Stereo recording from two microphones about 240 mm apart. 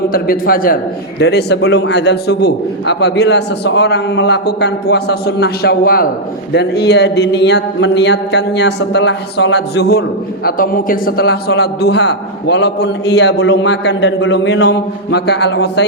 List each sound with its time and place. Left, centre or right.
0.1 s a man's voice: left